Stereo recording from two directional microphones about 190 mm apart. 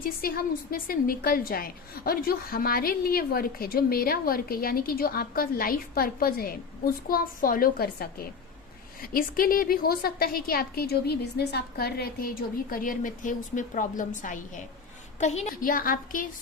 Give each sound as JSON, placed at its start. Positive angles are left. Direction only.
{"t": 0.0, "sound": "a woman's voice", "side_deg": 50}